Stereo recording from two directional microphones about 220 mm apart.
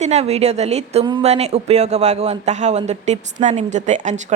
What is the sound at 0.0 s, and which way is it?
A woman's voice, 30° right (ahead or behind).